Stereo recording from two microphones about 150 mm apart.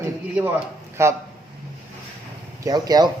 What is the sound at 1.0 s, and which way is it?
Speech, 20° right (ahead or behind).